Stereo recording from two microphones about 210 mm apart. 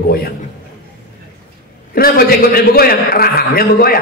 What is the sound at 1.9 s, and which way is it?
A man's voice, 45° left (ahead or behind).